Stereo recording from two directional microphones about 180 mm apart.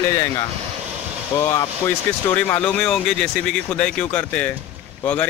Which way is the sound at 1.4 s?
15° left (ahead or behind).